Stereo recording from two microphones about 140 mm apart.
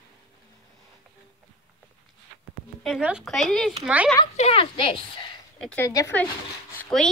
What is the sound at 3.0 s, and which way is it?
Speech, 5° right (ahead or behind).